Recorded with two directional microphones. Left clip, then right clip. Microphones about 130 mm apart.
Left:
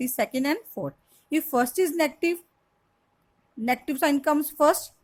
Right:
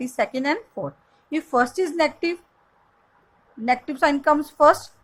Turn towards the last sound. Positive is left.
turn(degrees=40)  # may be behind; listen again after turning